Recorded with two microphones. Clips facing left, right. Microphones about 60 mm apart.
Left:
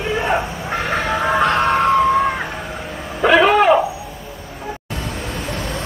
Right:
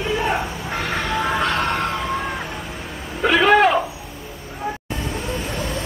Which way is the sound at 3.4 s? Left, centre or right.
Centre.